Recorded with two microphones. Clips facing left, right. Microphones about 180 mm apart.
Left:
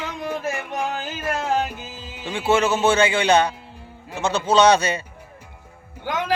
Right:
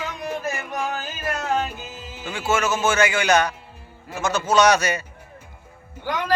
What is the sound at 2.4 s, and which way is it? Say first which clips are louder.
A man's voice: left 3 dB; 35° left (ahead or behind).